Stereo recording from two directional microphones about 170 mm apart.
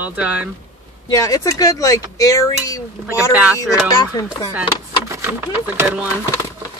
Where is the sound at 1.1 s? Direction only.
20° left (ahead or behind).